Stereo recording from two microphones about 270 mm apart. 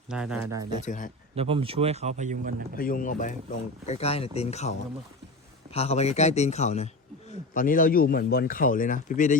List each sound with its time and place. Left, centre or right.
0.1 s speech: centre
0.7 s a man's voice: left
1.4 s speech: right
2.7 s a man's voice: left
5.7 s a man's voice: left